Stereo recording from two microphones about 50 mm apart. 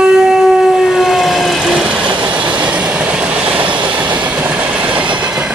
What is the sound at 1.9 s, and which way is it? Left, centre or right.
Train, right.